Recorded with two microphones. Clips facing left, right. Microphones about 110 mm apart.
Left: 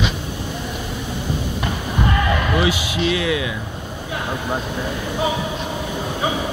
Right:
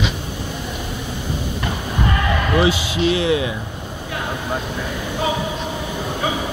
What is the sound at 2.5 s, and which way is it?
Speech, 30° right (ahead or behind).